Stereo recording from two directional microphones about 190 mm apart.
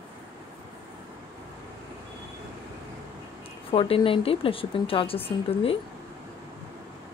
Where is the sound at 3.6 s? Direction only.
30° left (ahead or behind).